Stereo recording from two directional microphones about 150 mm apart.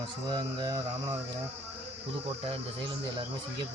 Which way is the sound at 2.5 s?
35° right (ahead or behind).